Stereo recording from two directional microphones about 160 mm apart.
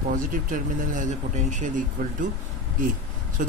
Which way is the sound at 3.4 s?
55° right (ahead or behind).